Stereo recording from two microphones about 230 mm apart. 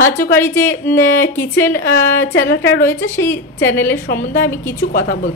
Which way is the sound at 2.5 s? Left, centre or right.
Left.